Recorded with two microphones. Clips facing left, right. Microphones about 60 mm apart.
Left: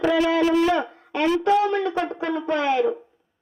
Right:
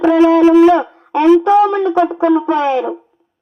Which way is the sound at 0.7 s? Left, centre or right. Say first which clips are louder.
Right 10 dB; right.